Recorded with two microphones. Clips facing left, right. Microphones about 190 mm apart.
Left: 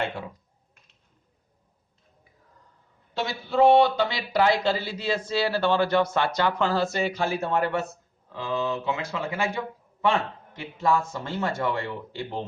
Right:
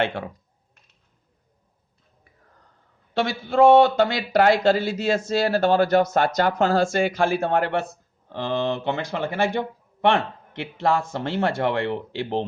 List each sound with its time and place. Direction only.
0.0 s speech: 80° right
3.4 s speech: 50° right (ahead or behind)
7.3 s speech: 75° right (ahead or behind)